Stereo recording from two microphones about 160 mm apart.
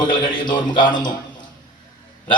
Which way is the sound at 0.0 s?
30° left (ahead or behind).